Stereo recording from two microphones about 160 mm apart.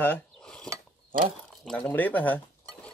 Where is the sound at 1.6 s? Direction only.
5° left (ahead or behind).